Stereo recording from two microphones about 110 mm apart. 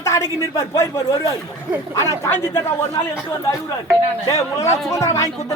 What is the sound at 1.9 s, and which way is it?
Speech, 25° left (ahead or behind).